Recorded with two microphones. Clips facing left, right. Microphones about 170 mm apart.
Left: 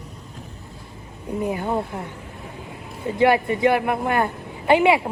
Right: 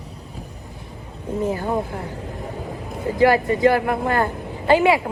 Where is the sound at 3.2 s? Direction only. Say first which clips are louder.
Right 2 dB; 20° left (ahead or behind).